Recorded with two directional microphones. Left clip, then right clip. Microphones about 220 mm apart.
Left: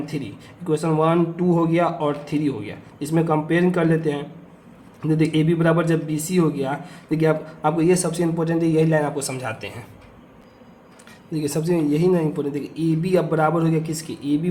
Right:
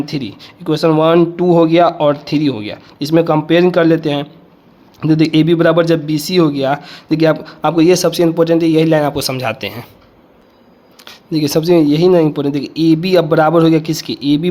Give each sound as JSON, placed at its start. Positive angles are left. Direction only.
{"t": 0.0, "sound": "speech", "side_deg": -45}
{"t": 11.0, "sound": "speech", "side_deg": -40}